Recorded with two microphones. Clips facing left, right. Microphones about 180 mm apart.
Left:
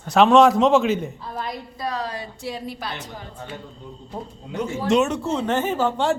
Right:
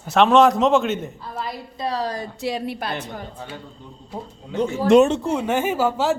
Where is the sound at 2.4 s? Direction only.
70° right (ahead or behind).